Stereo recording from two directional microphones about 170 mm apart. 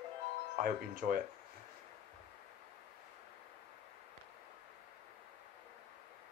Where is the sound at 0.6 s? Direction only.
55° right (ahead or behind).